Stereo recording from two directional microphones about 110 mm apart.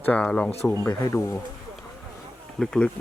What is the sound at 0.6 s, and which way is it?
Speech, 25° left (ahead or behind).